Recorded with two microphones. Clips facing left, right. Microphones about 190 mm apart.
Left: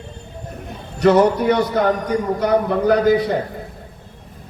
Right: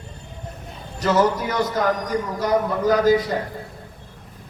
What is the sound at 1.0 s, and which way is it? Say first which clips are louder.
A man's voice: left 6 dB; 65° left (ahead or behind).